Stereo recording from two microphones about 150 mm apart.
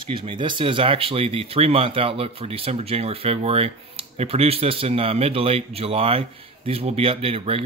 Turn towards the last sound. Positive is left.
turn(degrees=-40)  # may be behind; listen again after turning